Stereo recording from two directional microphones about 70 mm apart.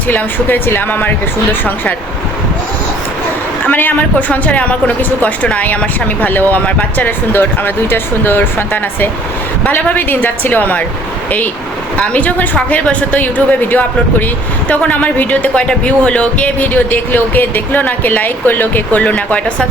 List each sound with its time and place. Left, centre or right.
0.1 s speech: left
3.7 s speech: left
11.9 s speech: left